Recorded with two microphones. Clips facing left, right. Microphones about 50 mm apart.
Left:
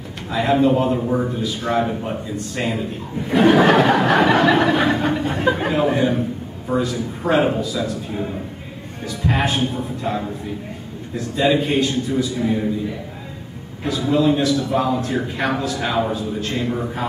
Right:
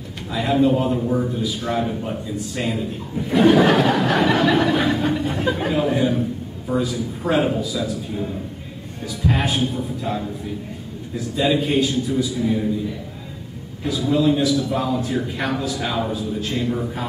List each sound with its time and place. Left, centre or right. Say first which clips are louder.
0.3 s a man's voice: left 2 dB; centre
0.9 s a man's voice: left 1 dB; left
1.3 s a man's voice: left 2 dB; centre
2.3 s a man's voice: left 1 dB; centre
8.1 s a man's voice: left 1 dB; left
9.2 s a man's voice: left 1 dB; centre
12.4 s a man's voice: left 1 dB; centre
13.8 s a man's voice: left 1 dB; centre
15.9 s a man's voice: left 5 dB; centre
16.2 s a man's voice: left 1 dB; centre